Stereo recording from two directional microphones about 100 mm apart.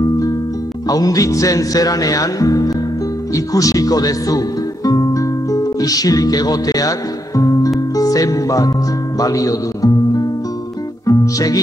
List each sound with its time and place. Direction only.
0.8 s speech: 40° left (ahead or behind)
3.3 s music: 35° left (ahead or behind)
9.2 s a man's voice: 35° left (ahead or behind)
11.1 s music: 35° left (ahead or behind)